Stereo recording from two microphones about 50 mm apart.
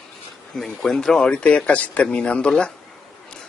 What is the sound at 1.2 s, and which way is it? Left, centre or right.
Speech, left.